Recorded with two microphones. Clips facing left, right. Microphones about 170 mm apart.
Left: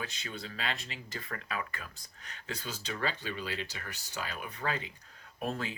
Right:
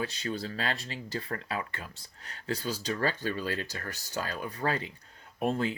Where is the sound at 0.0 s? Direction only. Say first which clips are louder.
Right 8 dB; 35° right (ahead or behind).